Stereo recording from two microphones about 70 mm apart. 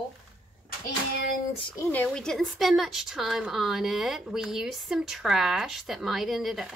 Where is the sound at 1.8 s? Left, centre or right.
Left.